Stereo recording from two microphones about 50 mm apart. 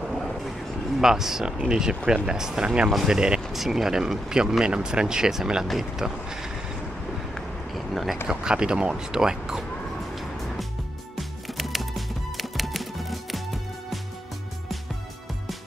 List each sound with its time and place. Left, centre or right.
0.9 s speech: centre
2.9 s speech: centre
3.2 s speech: centre
7.3 s a sound: centre
8.3 s speech: centre
11.1 s music: centre